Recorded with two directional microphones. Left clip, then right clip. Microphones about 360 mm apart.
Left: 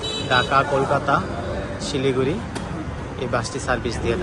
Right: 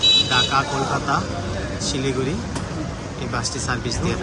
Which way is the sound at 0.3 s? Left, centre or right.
Centre.